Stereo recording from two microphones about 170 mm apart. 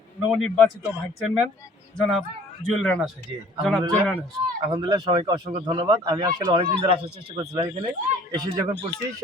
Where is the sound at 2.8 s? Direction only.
Centre (ahead or behind).